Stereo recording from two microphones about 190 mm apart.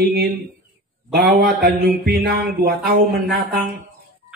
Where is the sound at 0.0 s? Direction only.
55° right (ahead or behind).